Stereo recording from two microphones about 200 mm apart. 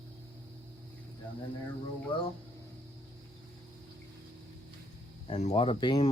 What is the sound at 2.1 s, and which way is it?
Speech, 25° left (ahead or behind).